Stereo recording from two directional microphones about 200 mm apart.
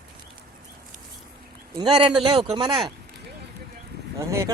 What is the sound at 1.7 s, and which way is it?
Speech, 20° right (ahead or behind).